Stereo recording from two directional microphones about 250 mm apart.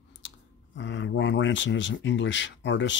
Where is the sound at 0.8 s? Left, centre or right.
Left.